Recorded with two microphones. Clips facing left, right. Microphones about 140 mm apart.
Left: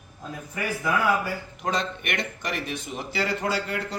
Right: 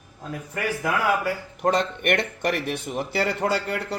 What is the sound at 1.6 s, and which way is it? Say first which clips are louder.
Speech: right 7 dB; 60° right (ahead or behind).